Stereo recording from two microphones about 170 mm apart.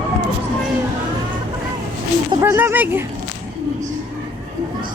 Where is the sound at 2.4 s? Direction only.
10° right (ahead or behind).